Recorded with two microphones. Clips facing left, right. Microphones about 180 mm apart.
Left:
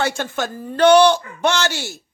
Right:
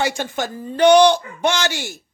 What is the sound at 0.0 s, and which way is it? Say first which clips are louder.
A woman's voice: even; 15° right (ahead or behind).